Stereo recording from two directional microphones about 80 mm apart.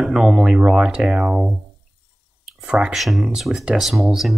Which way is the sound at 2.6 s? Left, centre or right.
Centre.